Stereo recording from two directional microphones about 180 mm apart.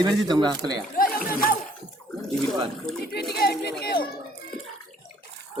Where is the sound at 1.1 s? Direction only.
50° left (ahead or behind).